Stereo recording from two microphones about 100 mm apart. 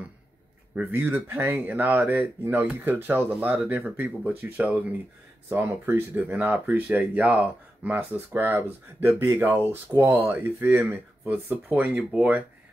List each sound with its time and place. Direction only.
0.7 s speech: 15° right (ahead or behind)